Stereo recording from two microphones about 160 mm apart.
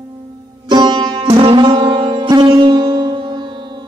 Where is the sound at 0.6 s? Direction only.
30° right (ahead or behind).